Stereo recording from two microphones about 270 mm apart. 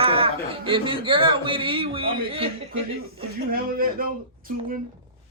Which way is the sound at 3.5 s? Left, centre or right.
Right.